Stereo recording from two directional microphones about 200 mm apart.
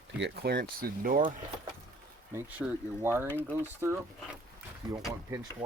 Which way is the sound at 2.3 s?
10° right (ahead or behind).